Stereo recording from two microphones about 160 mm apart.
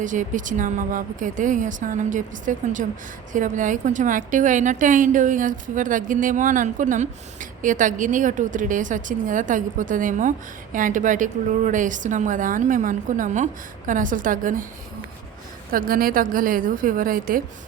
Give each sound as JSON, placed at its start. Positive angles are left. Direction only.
{"t": 0.0, "sound": "a woman's voice", "side_deg": -55}
{"t": 15.7, "sound": "a woman's voice", "side_deg": -65}